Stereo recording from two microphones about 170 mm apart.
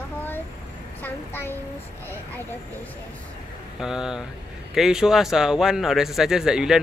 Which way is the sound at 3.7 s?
5° right (ahead or behind).